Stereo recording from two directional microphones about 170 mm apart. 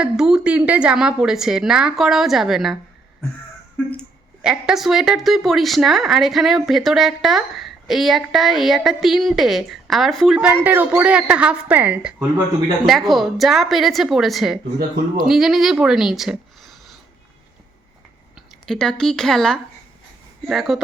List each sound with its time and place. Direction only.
0.0 s a woman's voice: 5° right (ahead or behind)
4.4 s a woman's voice: 5° right (ahead or behind)
18.6 s a woman's voice: 5° left (ahead or behind)